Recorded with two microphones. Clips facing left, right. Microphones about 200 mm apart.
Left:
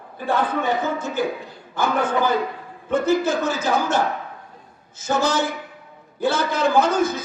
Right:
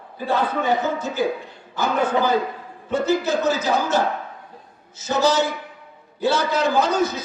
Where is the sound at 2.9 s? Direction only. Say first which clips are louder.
Left 1 dB; 50° left (ahead or behind).